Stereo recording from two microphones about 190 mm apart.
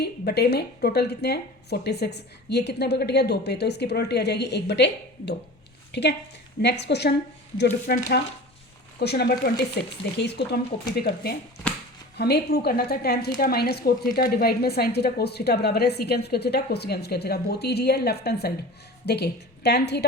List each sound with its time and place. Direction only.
0.0 s a woman's voice: 60° left (ahead or behind)